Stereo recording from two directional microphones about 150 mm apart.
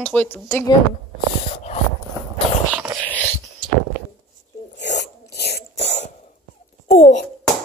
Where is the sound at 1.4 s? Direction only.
40° left (ahead or behind).